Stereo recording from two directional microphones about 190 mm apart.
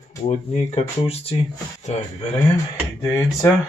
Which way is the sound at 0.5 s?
30° left (ahead or behind).